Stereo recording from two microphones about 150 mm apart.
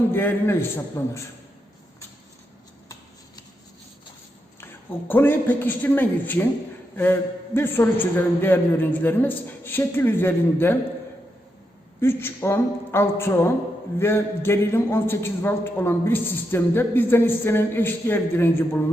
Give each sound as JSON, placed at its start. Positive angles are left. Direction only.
{"t": 0.1, "sound": "a man's voice", "side_deg": 15}
{"t": 4.6, "sound": "a man's voice", "side_deg": 15}
{"t": 11.9, "sound": "a man's voice", "side_deg": 15}